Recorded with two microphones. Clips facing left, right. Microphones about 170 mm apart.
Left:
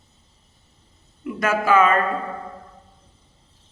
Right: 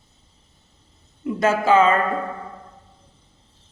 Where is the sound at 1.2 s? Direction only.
25° right (ahead or behind).